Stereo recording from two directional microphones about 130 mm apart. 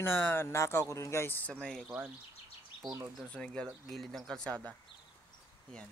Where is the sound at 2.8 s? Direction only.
25° right (ahead or behind).